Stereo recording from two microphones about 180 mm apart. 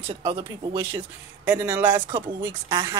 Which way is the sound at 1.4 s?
10° right (ahead or behind).